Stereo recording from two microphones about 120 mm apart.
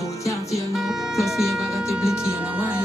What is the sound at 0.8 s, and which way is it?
Music, 5° right (ahead or behind).